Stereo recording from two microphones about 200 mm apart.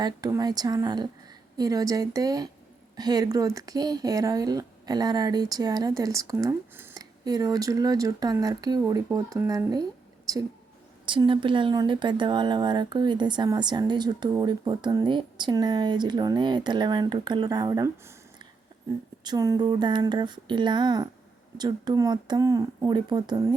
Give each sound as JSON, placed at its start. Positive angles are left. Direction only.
{"t": 0.0, "sound": "speech", "side_deg": -20}
{"t": 11.0, "sound": "speech", "side_deg": -25}